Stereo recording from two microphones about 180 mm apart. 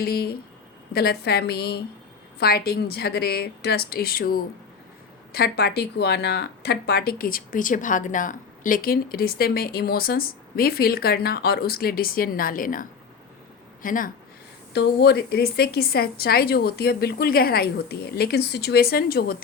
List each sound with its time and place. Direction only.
0.0 s speech: 60° left (ahead or behind)
14.7 s speech: 65° left (ahead or behind)